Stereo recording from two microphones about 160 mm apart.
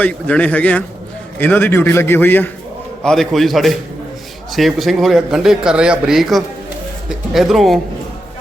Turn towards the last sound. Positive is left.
turn(degrees=0)  # may be behind; listen again after turning